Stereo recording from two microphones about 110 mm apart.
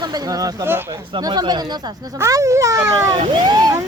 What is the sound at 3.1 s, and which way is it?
Speech, 45° right (ahead or behind).